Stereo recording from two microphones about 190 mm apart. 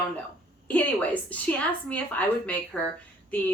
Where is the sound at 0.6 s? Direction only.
5° left (ahead or behind).